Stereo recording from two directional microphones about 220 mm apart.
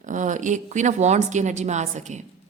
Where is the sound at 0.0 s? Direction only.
35° right (ahead or behind).